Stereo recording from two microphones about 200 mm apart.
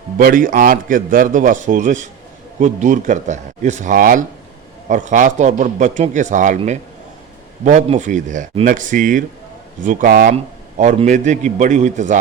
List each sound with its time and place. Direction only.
0.2 s speech: 45° right (ahead or behind)
7.6 s speech: 35° right (ahead or behind)